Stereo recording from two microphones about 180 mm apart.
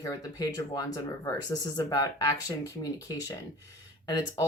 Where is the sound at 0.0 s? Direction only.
20° left (ahead or behind).